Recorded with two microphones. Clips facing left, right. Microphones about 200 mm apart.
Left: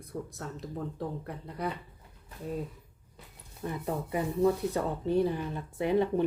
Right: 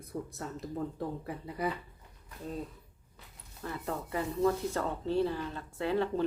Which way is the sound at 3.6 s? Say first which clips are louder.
Left 3 dB; 15° left (ahead or behind).